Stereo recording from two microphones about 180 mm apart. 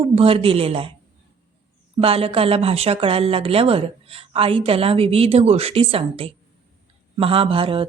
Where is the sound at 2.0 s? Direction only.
30° right (ahead or behind).